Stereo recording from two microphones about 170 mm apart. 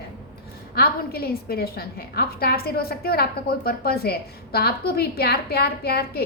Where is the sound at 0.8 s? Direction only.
65° left (ahead or behind).